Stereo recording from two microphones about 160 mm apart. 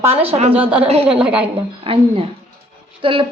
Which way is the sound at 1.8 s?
35° right (ahead or behind).